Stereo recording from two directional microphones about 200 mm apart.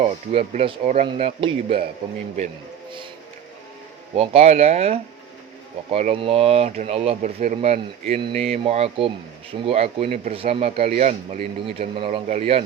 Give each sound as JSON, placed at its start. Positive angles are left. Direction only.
{"t": 0.0, "sound": "speech", "side_deg": -30}
{"t": 4.1, "sound": "speech", "side_deg": -30}